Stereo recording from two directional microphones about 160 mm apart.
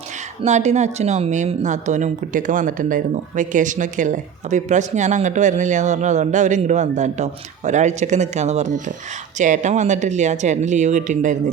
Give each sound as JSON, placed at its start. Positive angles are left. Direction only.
{"t": 0.4, "sound": "speech", "side_deg": -45}